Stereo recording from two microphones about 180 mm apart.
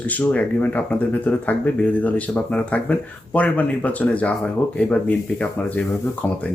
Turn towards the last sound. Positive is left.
turn(degrees=10)  # may be behind; listen again after turning